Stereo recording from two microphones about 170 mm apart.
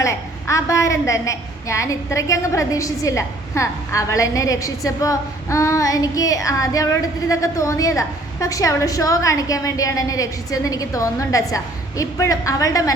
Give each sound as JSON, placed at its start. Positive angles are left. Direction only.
{"t": 0.0, "sound": "a woman's voice", "side_deg": 20}